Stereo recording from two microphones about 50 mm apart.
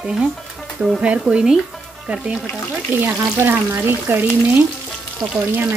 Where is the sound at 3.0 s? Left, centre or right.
Right.